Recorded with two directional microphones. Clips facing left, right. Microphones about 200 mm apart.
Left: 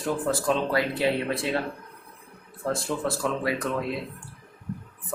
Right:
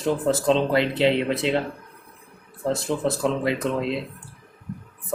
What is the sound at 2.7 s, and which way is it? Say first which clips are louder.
Speech: right 4 dB; 20° right (ahead or behind).